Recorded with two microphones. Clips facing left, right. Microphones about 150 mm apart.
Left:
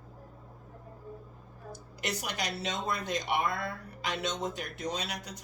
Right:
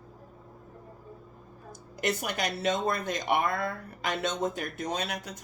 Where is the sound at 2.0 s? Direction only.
50° right (ahead or behind).